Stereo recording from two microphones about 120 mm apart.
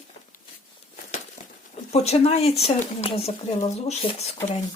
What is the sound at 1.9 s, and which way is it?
Speech, 60° left (ahead or behind).